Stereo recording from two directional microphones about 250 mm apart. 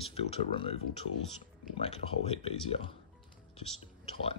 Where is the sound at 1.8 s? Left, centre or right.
Left.